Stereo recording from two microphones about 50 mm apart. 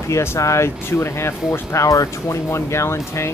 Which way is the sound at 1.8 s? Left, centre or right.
Left.